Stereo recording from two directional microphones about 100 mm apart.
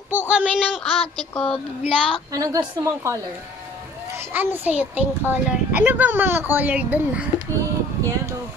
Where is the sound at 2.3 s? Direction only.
30° right (ahead or behind).